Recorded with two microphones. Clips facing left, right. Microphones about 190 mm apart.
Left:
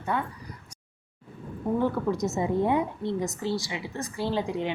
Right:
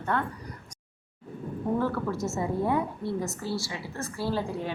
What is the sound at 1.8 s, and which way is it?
A woman's voice, 15° left (ahead or behind).